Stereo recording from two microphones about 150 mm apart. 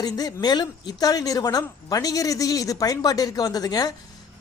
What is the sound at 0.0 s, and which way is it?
Speech, 25° left (ahead or behind).